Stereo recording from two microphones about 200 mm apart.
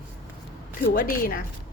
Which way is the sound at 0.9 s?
45° left (ahead or behind).